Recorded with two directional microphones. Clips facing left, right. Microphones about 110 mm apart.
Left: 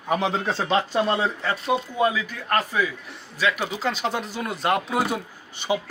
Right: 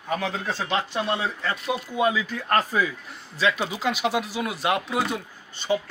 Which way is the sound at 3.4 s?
20° right (ahead or behind).